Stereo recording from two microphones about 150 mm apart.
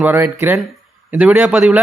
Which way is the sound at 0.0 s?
15° right (ahead or behind).